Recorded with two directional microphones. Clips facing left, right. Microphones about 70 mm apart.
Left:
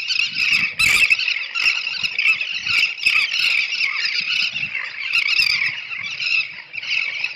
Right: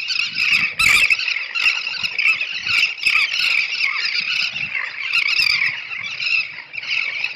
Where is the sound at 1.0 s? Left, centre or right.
Right.